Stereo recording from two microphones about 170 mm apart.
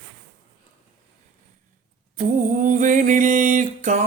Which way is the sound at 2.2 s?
45° right (ahead or behind).